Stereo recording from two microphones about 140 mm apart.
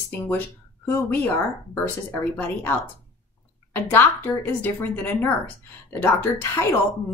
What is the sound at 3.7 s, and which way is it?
A woman's voice, 15° left (ahead or behind).